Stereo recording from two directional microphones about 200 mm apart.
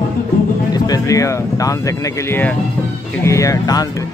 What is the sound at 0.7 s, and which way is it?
Speech, 20° left (ahead or behind).